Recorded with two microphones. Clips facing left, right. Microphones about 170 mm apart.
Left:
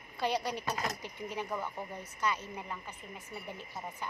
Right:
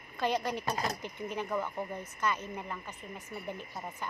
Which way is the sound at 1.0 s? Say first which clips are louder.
Right 2 dB; 10° left (ahead or behind).